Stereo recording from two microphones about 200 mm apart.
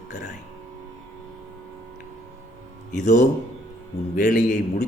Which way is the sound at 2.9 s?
35° left (ahead or behind).